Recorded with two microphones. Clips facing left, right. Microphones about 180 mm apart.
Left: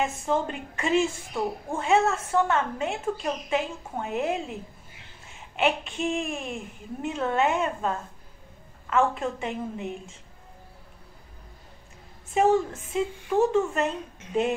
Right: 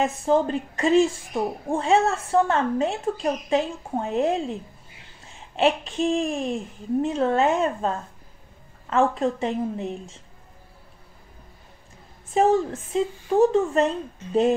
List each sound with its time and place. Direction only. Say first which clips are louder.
0.0 s a woman's voice: right 5 dB; 35° right (ahead or behind)
8.9 s a woman's voice: right 3 dB; 35° right (ahead or behind)
12.4 s a woman's voice: right 2 dB; 35° right (ahead or behind)